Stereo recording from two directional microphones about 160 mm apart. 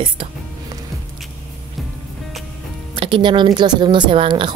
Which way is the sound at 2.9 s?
35° right (ahead or behind).